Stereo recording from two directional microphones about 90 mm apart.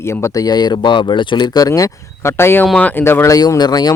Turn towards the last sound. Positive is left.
turn(degrees=45)  # may be behind; listen again after turning